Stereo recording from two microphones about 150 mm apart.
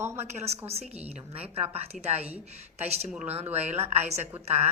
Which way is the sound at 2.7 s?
45° right (ahead or behind).